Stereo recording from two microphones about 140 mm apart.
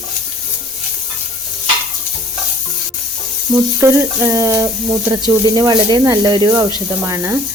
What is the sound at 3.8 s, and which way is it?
Speech, 20° right (ahead or behind).